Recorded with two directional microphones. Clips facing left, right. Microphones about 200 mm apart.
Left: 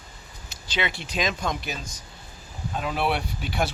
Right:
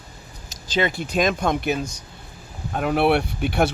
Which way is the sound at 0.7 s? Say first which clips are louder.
Right 7 dB; 45° right (ahead or behind).